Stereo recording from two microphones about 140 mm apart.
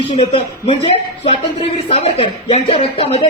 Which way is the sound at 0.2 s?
45° left (ahead or behind).